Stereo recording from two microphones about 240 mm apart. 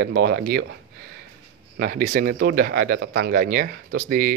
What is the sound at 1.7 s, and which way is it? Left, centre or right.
Speech, right.